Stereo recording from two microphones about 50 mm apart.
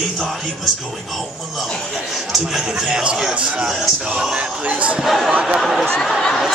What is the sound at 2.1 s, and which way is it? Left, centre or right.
A man's voice, centre.